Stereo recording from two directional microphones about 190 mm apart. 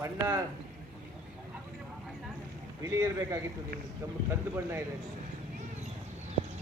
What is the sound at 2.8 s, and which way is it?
Speech, 15° right (ahead or behind).